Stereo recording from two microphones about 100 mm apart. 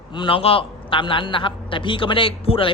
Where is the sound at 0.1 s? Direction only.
55° left (ahead or behind).